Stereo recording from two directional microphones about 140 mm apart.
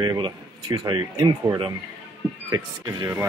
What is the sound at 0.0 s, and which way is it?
Speech, 30° right (ahead or behind).